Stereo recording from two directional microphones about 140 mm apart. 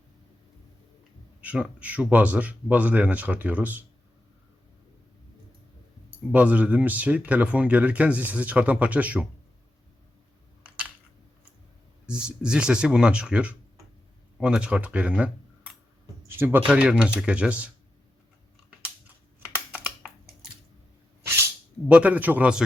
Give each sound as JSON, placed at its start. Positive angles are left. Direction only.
{"t": 1.4, "sound": "speech", "side_deg": -10}
{"t": 6.3, "sound": "speech", "side_deg": -10}
{"t": 10.6, "sound": "a sound", "side_deg": -10}
{"t": 12.0, "sound": "speech", "side_deg": -5}
{"t": 19.5, "sound": "computer keyboard", "side_deg": -15}
{"t": 21.8, "sound": "speech", "side_deg": -10}